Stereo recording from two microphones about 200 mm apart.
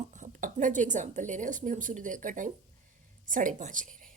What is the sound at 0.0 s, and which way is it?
A woman's voice, 40° right (ahead or behind).